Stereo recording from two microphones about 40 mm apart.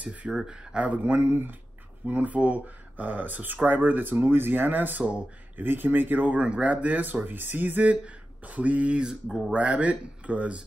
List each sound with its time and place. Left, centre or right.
0.0 s speech: right
0.5 s speech: centre
0.7 s speech: right
1.1 s speech: right
2.0 s speech: right
6.4 s speech: right